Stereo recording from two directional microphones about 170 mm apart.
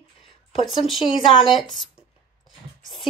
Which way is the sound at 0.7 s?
Centre (ahead or behind).